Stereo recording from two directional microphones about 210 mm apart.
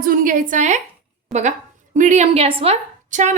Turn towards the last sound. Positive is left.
turn(degrees=-35)  # may be behind; listen again after turning